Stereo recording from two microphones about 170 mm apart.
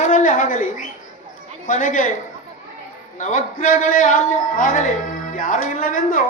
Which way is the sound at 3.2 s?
50° left (ahead or behind).